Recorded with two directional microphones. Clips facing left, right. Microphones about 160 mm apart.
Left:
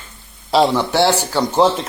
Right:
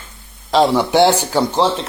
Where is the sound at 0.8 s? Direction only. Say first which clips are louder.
Right 3 dB; 15° right (ahead or behind).